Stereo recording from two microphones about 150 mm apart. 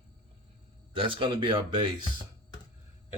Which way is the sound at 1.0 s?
35° right (ahead or behind).